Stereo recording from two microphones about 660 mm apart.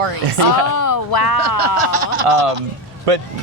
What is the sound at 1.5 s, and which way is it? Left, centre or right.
Speech, right.